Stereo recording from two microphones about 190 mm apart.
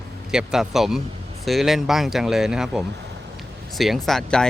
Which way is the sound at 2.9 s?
65° right (ahead or behind).